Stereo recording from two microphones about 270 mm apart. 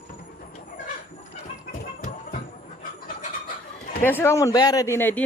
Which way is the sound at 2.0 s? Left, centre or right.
Left.